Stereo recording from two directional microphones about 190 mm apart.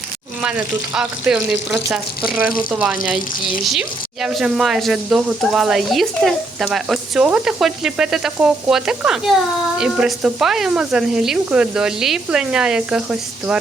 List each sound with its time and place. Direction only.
0.4 s speech: 5° right (ahead or behind)